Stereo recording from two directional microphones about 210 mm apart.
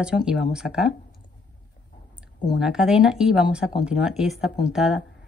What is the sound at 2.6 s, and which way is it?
Speech, 5° right (ahead or behind).